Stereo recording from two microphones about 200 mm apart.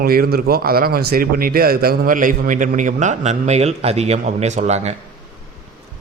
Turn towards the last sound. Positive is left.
turn(degrees=-35)  # may be behind; listen again after turning